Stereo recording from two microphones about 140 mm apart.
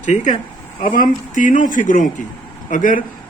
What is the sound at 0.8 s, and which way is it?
Speech, 80° left.